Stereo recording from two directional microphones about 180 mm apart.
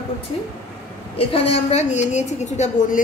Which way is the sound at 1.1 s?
35° left (ahead or behind).